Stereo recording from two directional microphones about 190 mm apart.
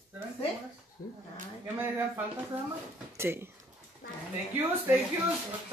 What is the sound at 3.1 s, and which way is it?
Speech, 15° right (ahead or behind).